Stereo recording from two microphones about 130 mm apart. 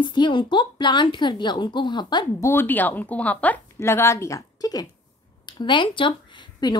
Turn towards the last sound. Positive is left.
turn(degrees=40)  # may be behind; listen again after turning